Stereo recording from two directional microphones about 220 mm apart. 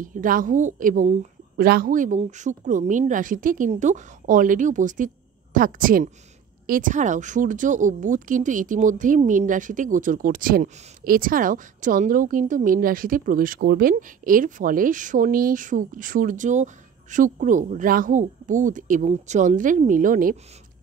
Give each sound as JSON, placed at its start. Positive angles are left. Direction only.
{"t": 0.0, "sound": "a woman's voice", "side_deg": -40}